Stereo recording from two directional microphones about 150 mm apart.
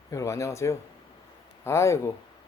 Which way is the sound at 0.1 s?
20° left (ahead or behind).